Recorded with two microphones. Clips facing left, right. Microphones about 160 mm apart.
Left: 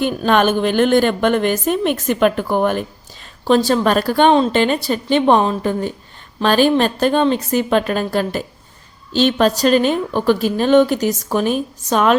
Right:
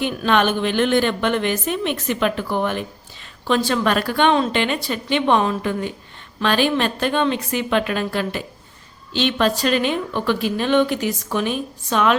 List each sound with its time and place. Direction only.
0.0 s a woman's voice: 45° left (ahead or behind)